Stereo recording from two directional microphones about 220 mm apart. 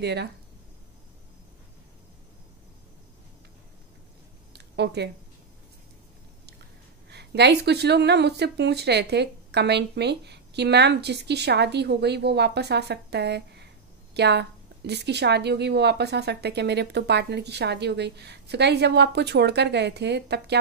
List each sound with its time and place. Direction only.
0.0 s speech: 50° right (ahead or behind)
4.7 s speech: 50° right (ahead or behind)
7.1 s speech: 50° right (ahead or behind)